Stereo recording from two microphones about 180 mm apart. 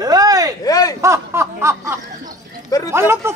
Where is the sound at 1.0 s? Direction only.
15° right (ahead or behind).